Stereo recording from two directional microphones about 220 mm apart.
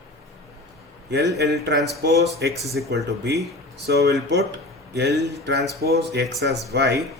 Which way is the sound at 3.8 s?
45° right (ahead or behind).